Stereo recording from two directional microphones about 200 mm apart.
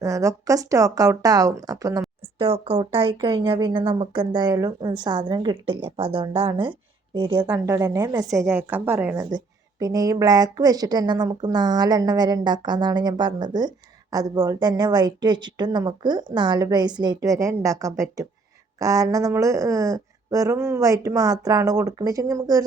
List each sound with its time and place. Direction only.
0.0 s speech: 15° right (ahead or behind)
2.4 s a woman's voice: 30° right (ahead or behind)